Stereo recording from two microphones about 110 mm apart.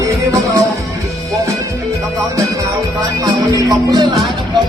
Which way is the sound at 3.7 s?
35° right (ahead or behind).